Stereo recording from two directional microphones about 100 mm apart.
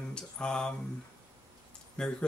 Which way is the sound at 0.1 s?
10° left (ahead or behind).